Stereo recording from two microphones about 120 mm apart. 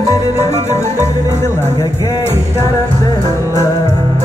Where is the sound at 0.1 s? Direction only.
25° left (ahead or behind).